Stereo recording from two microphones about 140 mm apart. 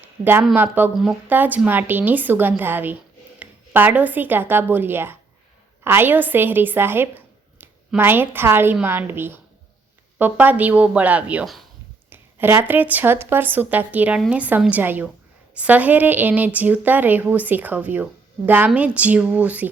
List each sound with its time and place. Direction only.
0.5 s a woman's voice: 15° right (ahead or behind)